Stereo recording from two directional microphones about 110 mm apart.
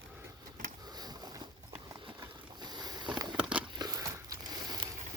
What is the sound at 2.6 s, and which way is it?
Boat, 40° right (ahead or behind).